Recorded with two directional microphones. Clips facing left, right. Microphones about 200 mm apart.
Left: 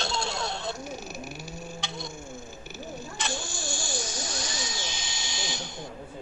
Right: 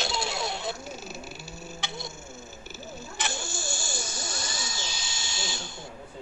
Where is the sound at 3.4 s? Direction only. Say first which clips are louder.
Left 1 dB; 15° left (ahead or behind).